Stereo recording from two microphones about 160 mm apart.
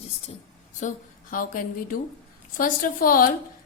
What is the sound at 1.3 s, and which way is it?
Speech, 60° left (ahead or behind).